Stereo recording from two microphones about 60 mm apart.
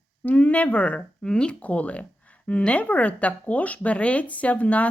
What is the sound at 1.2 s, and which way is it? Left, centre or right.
Speech, centre.